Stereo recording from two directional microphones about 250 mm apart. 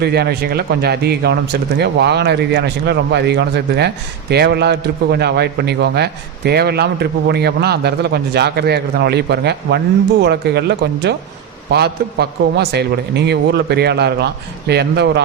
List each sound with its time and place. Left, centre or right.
0.0 s speech: right